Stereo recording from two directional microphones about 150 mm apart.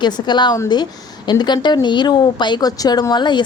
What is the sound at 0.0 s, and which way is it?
A woman's voice, 30° left (ahead or behind).